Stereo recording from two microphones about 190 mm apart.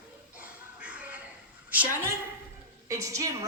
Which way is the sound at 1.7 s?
10° right (ahead or behind).